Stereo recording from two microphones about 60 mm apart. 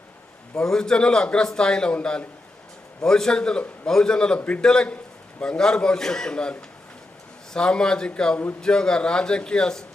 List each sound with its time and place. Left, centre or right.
0.5 s a man's voice: centre
4.6 s a man's voice: centre